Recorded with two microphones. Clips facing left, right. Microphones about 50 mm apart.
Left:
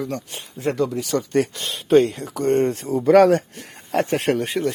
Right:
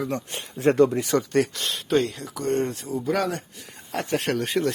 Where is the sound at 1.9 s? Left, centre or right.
Left.